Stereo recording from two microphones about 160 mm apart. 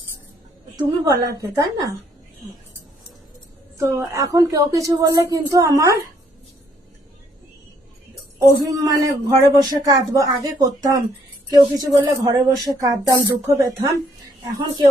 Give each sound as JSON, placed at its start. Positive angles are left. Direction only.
{"t": 0.8, "sound": "speech", "side_deg": -25}
{"t": 3.8, "sound": "speech", "side_deg": -20}
{"t": 8.4, "sound": "speech", "side_deg": -20}